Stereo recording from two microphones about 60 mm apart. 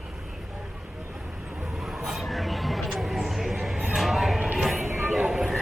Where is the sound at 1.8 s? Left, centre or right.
Centre.